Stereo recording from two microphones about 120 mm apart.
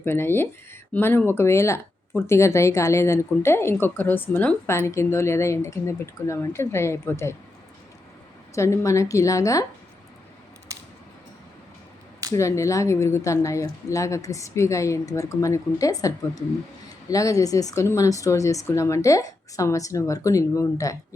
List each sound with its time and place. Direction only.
0.0 s speech: 20° left (ahead or behind)
8.5 s speech: 25° left (ahead or behind)
12.3 s speech: 25° left (ahead or behind)